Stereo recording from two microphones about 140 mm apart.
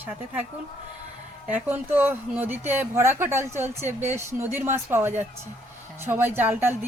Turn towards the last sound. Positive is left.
turn(degrees=-15)  # may be behind; listen again after turning